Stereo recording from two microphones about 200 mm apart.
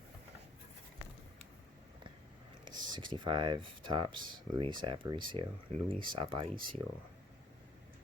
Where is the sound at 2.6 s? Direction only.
25° right (ahead or behind).